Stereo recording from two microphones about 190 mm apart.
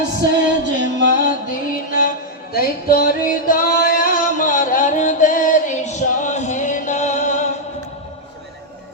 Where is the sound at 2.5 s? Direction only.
50° left (ahead or behind).